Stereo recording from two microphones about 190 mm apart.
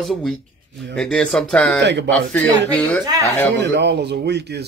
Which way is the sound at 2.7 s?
10° left (ahead or behind).